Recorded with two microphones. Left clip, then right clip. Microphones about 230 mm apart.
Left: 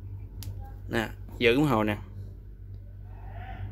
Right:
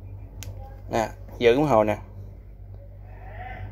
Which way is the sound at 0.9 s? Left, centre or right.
Centre.